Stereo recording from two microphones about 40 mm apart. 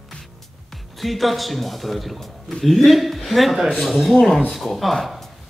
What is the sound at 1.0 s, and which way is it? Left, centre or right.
Speech, centre.